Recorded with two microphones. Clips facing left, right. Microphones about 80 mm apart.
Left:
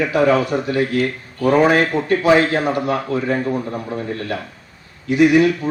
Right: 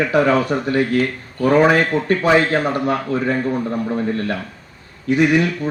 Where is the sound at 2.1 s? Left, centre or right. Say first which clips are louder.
Left 1 dB; right.